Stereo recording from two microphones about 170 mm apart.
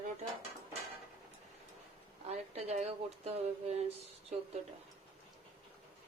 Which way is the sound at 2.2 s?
40° right (ahead or behind).